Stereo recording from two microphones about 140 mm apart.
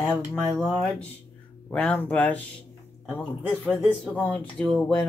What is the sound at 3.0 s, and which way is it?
Speech, centre (ahead or behind).